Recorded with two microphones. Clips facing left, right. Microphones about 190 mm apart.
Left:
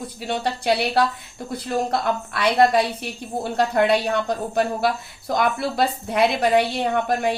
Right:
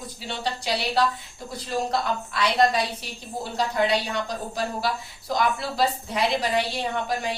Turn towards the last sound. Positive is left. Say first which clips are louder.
# left 6 dB
turn(degrees=55)  # may be behind; listen again after turning